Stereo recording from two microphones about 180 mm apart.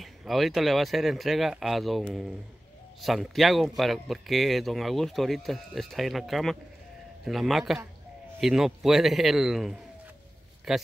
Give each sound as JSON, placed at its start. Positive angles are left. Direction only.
{"t": 0.0, "sound": "speech", "side_deg": 0}